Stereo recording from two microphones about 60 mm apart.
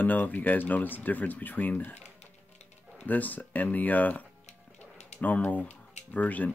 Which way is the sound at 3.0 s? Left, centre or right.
Left.